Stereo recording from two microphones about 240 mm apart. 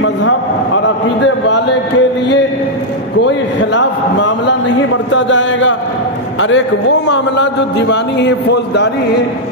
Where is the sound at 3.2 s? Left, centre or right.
Left.